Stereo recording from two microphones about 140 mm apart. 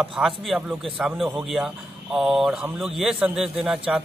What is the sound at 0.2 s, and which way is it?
A man's voice, 10° right (ahead or behind).